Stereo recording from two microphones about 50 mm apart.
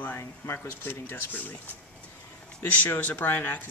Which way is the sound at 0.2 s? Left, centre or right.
Left.